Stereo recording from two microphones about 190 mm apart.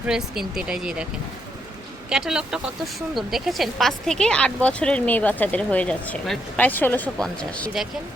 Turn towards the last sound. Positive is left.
turn(degrees=0)  # may be behind; listen again after turning